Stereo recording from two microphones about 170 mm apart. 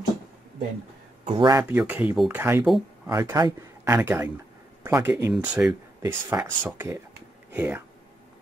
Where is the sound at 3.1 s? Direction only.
20° right (ahead or behind).